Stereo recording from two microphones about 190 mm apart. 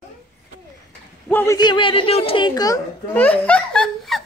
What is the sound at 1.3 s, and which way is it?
Speech, 15° left (ahead or behind).